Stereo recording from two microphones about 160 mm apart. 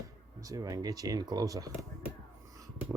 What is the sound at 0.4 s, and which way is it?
A man's voice, 20° right (ahead or behind).